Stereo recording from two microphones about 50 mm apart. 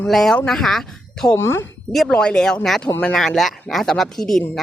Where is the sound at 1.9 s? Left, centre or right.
Centre.